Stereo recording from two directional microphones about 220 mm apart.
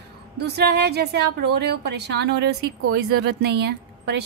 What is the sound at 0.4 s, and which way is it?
Speech, 50° right (ahead or behind).